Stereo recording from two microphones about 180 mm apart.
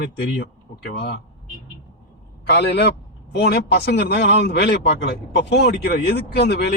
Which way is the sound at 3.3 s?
65° left (ahead or behind).